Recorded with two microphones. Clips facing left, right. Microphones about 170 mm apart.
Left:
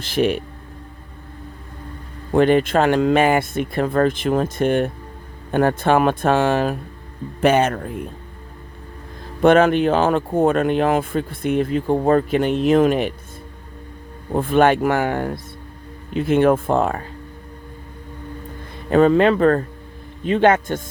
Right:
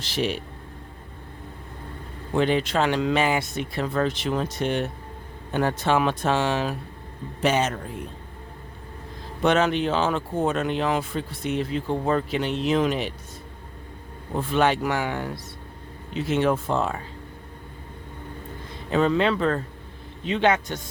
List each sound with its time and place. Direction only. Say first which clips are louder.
0.0 s speech: left 7 dB; 55° left (ahead or behind)
2.3 s speech: left 7 dB; 50° left (ahead or behind)
9.4 s speech: left 7 dB; 55° left (ahead or behind)
14.3 s speech: left 7 dB; 50° left (ahead or behind)
18.9 s speech: left 7 dB; 50° left (ahead or behind)